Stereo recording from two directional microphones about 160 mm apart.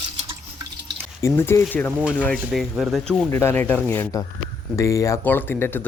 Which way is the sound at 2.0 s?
5° right (ahead or behind).